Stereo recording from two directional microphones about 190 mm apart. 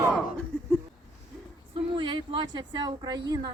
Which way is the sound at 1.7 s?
25° right (ahead or behind).